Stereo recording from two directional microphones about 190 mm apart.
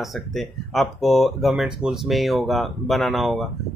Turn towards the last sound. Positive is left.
turn(degrees=0)  # may be behind; listen again after turning